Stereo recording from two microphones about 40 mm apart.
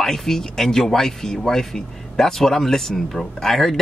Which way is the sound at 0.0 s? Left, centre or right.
Centre.